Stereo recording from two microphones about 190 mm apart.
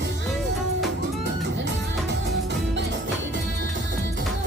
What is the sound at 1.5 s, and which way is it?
Music, 70° right (ahead or behind).